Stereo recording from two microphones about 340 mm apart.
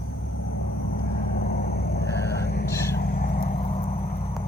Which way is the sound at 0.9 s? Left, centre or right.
Left.